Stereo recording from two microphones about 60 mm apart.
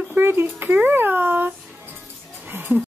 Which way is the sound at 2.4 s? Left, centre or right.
Right.